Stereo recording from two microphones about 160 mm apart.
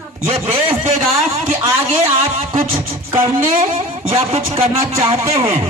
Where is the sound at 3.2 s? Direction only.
40° right (ahead or behind).